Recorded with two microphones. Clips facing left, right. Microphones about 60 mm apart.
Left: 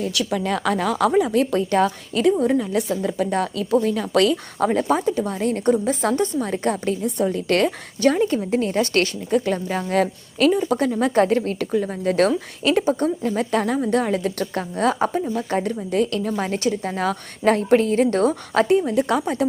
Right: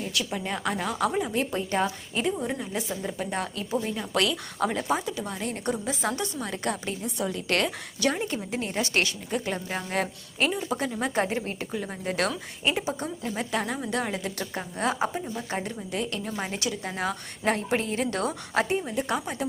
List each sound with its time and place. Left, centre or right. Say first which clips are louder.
0.1 s speech: left 8 dB; left
2.3 s a woman's voice: left 11 dB; left
3.8 s speech: left 9 dB; left
4.2 s a woman's voice: left 7 dB; left
16.5 s a woman's voice: left 9 dB; left
18.9 s a woman's voice: left 8 dB; left